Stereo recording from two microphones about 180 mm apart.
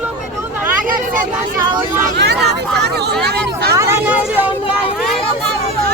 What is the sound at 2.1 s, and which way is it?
Speech, 70° right (ahead or behind).